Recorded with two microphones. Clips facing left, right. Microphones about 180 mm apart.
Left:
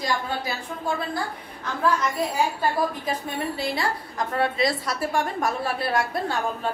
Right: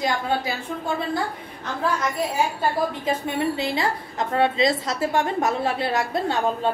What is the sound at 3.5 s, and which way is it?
A woman's voice, 20° right (ahead or behind).